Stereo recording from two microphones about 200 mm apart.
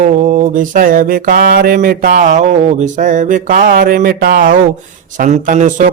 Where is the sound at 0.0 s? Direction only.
40° right (ahead or behind).